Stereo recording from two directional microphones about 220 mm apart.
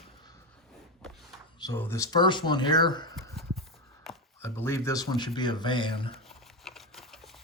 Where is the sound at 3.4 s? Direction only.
Centre (ahead or behind).